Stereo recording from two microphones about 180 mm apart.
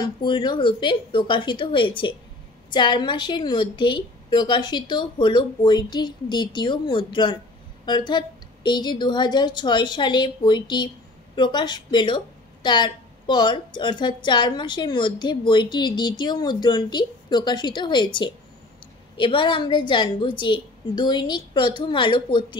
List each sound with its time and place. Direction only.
0.0 s a woman's voice: 25° left (ahead or behind)